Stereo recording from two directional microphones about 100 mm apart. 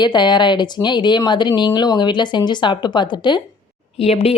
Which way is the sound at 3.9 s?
85° left.